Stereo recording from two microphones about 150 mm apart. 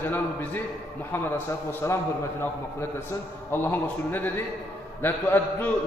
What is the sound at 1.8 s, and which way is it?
Speech, 20° left (ahead or behind).